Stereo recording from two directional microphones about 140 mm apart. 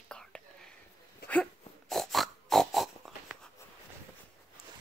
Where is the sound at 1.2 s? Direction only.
5° left (ahead or behind).